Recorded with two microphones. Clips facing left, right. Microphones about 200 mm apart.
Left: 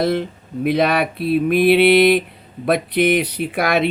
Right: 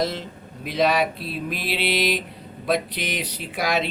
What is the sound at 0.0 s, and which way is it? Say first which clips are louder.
Speech: left 7 dB; 60° left (ahead or behind).